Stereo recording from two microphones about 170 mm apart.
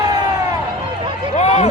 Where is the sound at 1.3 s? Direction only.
40° left (ahead or behind).